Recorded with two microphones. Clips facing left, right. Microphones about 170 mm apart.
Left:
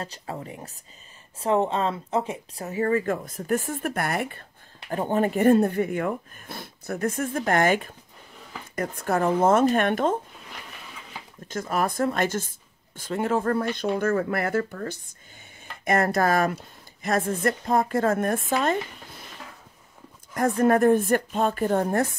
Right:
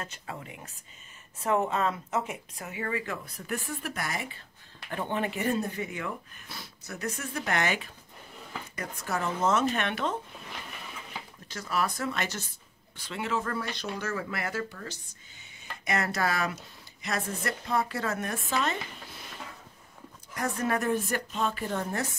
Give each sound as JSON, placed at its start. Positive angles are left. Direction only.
{"t": 0.0, "sound": "speech", "side_deg": 35}
{"t": 4.8, "sound": "speech", "side_deg": 40}
{"t": 11.4, "sound": "speech", "side_deg": 50}
{"t": 20.3, "sound": "speech", "side_deg": 50}